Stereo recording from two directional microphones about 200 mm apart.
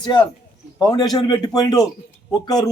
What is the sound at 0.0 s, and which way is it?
A man's voice, 20° left (ahead or behind).